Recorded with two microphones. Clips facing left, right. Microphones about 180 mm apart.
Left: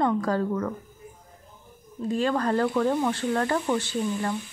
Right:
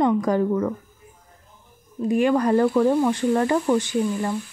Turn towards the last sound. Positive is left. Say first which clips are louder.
# right 4 dB
turn(degrees=-10)  # may be behind; listen again after turning